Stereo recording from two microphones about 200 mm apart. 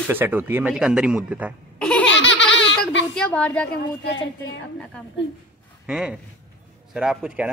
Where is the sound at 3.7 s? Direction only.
60° left (ahead or behind).